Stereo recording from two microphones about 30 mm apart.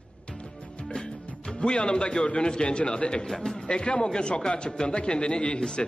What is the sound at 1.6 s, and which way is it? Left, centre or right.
A man's voice, left.